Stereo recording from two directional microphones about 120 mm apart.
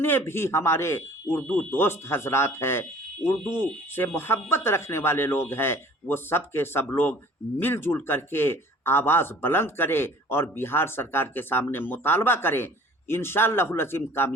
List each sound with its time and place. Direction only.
0.0 s speech: 20° left (ahead or behind)
3.9 s speech: 20° left (ahead or behind)